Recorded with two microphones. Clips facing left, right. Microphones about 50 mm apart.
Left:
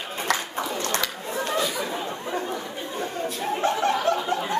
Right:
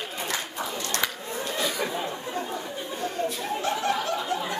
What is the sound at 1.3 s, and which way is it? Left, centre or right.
Chatter, left.